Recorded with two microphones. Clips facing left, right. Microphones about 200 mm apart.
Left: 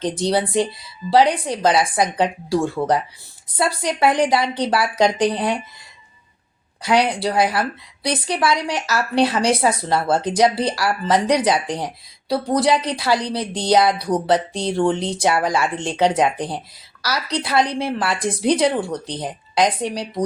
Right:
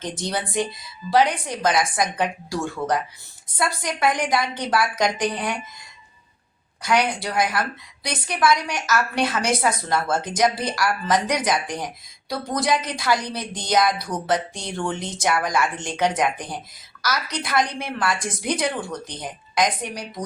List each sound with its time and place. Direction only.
0.3 s a woman's voice: 30° left (ahead or behind)
6.8 s a woman's voice: 30° left (ahead or behind)
12.9 s a woman's voice: 30° left (ahead or behind)